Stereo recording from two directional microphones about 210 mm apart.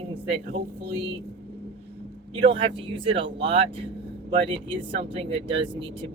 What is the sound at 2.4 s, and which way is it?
Speech, 25° right (ahead or behind).